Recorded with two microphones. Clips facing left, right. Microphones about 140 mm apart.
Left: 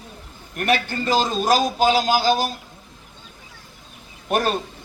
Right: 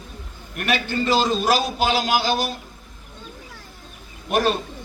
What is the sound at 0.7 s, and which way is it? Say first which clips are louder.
A man's voice: even; 45° left (ahead or behind).